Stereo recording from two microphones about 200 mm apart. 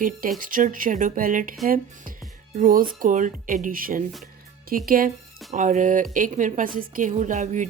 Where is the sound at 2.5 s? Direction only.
45° right (ahead or behind).